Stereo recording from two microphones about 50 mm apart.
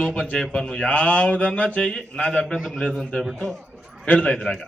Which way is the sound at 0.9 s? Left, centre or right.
Left.